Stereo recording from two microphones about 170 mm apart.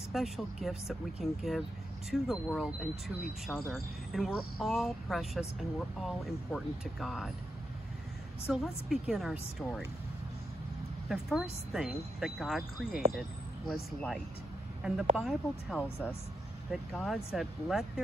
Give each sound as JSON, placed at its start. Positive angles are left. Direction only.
{"t": 0.1, "sound": "speech", "side_deg": 0}
{"t": 8.5, "sound": "speech", "side_deg": 0}
{"t": 11.1, "sound": "speech", "side_deg": 0}
{"t": 17.0, "sound": "speech", "side_deg": 0}